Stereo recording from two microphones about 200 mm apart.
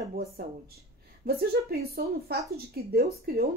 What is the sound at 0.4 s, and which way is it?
Speech, 50° right (ahead or behind).